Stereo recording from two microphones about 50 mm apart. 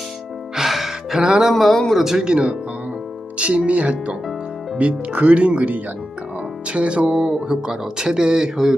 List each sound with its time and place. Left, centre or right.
0.5 s music: centre
1.2 s speech: centre
1.5 s speech: centre
2.1 s speech: centre